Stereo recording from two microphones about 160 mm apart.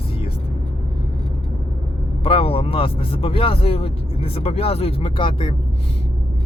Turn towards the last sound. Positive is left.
turn(degrees=30)  # may be behind; listen again after turning